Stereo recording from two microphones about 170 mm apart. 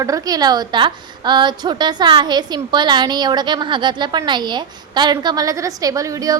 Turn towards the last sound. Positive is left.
turn(degrees=-20)  # may be behind; listen again after turning